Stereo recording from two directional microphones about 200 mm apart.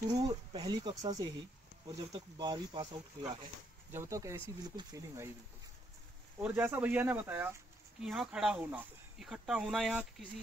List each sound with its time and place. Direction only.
0.2 s speech: 20° right (ahead or behind)
6.4 s speech: 10° right (ahead or behind)